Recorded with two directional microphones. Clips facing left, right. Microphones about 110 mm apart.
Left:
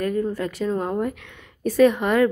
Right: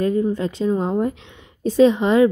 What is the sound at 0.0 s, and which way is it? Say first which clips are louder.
A woman's voice: right 4 dB; 20° right (ahead or behind).